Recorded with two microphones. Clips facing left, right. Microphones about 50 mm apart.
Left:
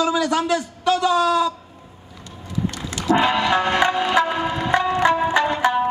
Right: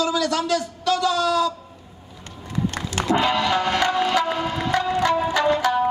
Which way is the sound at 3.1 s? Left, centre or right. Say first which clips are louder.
Left 3 dB; left.